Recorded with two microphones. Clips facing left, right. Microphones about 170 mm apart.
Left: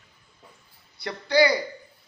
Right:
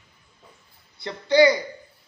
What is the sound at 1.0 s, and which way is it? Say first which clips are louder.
Speech: right 4 dB; 20° right (ahead or behind).